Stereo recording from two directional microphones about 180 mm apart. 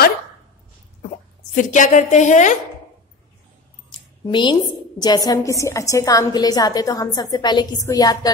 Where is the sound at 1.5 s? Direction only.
45° left (ahead or behind).